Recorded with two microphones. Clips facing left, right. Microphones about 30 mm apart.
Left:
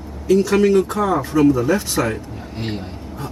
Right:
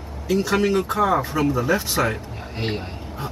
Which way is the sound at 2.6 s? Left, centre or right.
Centre.